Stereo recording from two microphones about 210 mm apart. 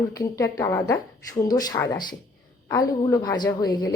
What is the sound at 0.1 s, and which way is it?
A woman's voice, 15° left (ahead or behind).